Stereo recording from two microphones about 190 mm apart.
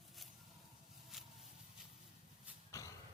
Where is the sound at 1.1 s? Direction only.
Centre (ahead or behind).